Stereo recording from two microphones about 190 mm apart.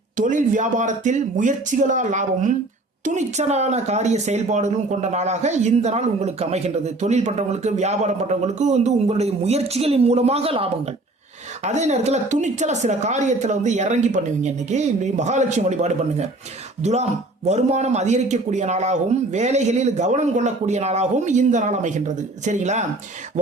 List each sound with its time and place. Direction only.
0.2 s speech: 40° right (ahead or behind)